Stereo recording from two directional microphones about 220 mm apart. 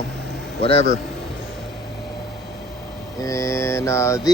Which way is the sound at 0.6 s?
25° left (ahead or behind).